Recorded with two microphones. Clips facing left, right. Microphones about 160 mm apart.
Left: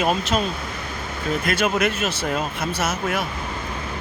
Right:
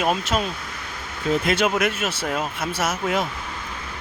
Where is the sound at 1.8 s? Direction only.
10° right (ahead or behind).